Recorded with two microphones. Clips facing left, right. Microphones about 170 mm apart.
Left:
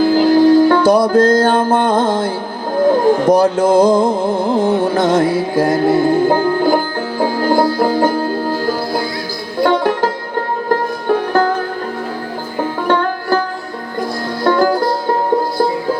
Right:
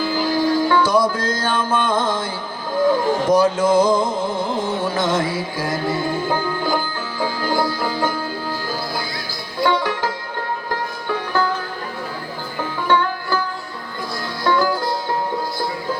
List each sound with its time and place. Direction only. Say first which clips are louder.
0.0 s music: left 10 dB; 55° left (ahead or behind)
12.5 s music: left 4 dB; 50° left (ahead or behind)
14.4 s music: left 6 dB; 50° left (ahead or behind)